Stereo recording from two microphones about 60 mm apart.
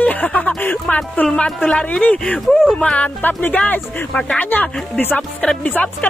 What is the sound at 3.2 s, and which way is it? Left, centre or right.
Speech, left.